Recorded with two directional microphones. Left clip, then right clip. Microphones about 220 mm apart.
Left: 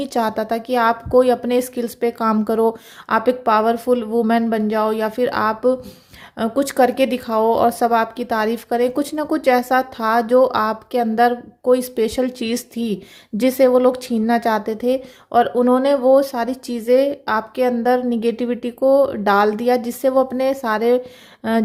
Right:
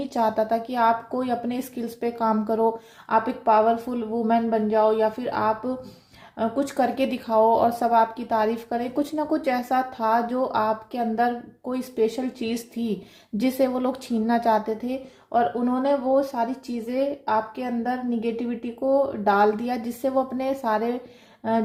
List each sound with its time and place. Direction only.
0.0 s speech: 35° left (ahead or behind)